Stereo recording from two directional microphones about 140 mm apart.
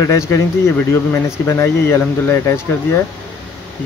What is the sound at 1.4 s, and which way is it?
Speech, 20° left (ahead or behind).